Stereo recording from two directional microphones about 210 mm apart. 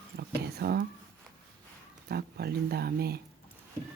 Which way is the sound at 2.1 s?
50° right (ahead or behind).